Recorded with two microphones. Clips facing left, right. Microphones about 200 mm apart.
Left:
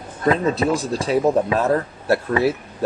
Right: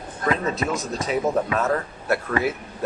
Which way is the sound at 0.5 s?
30° left (ahead or behind).